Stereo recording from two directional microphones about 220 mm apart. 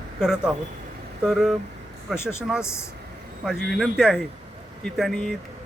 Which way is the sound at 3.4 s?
5° right (ahead or behind).